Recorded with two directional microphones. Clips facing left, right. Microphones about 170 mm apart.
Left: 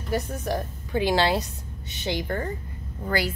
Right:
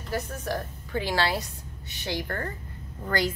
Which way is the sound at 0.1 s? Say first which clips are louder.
Left 3 dB; 15° left (ahead or behind).